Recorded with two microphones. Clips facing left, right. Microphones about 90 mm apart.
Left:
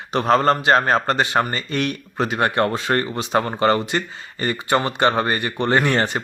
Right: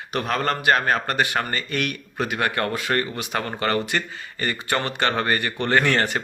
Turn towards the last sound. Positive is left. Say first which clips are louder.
# left 2 dB
turn(degrees=20)  # may be behind; listen again after turning